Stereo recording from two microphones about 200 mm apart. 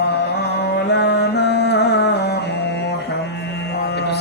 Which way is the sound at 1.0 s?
55° left (ahead or behind).